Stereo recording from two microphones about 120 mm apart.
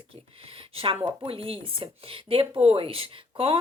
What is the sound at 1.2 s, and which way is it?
Speech, 50° right (ahead or behind).